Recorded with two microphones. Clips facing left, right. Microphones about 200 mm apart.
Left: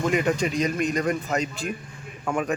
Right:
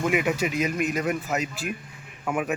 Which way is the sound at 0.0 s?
10° right (ahead or behind).